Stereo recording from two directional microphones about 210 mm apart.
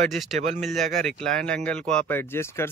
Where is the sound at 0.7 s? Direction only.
Centre (ahead or behind).